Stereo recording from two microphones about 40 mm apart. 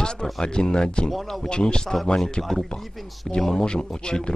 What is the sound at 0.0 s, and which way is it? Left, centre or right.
A man's voice, centre.